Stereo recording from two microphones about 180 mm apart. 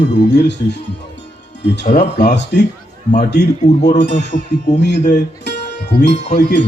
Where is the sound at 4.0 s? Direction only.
70° left (ahead or behind).